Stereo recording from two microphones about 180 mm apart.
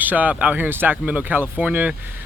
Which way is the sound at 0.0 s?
10° right (ahead or behind).